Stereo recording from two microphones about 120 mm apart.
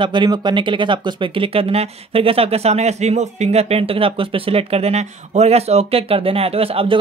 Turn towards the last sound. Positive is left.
turn(degrees=-50)  # may be behind; listen again after turning